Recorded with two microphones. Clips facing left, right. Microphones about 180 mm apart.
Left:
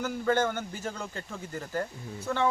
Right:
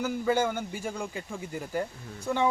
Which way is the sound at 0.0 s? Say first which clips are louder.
Right 1 dB; 10° right (ahead or behind).